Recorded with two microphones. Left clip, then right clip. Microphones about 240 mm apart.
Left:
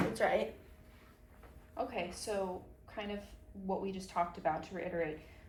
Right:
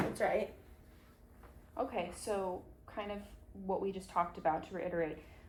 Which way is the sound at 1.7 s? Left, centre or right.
Centre.